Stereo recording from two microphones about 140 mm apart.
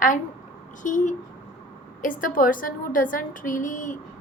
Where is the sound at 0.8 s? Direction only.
65° left (ahead or behind).